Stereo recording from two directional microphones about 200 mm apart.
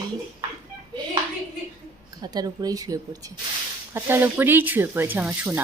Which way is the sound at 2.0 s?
20° right (ahead or behind).